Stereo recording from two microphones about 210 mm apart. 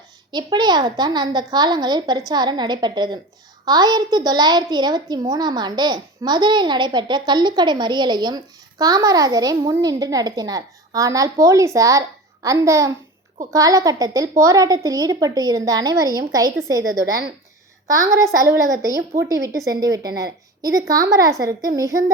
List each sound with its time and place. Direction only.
0.3 s a woman's voice: 20° right (ahead or behind)